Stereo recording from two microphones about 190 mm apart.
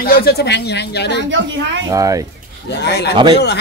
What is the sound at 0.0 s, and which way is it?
Speech, 55° left (ahead or behind).